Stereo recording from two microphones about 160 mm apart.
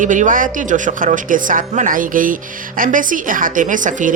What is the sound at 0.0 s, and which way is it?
Speech, 55° right (ahead or behind).